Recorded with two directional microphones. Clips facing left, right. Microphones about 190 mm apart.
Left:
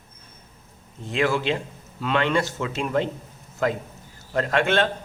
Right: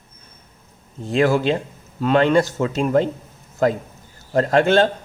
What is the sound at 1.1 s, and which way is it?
A man's voice, 40° right (ahead or behind).